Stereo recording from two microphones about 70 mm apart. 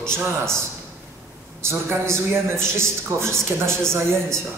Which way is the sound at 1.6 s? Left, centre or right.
Right.